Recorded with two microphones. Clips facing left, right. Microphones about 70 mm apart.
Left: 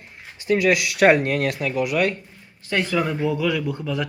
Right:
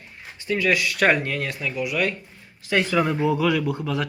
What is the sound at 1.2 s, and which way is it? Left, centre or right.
Speech, left.